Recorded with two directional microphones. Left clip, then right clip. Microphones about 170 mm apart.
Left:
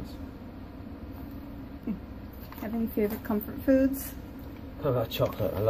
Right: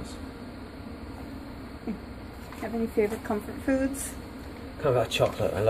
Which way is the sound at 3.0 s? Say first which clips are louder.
Right 3 dB; 35° left (ahead or behind).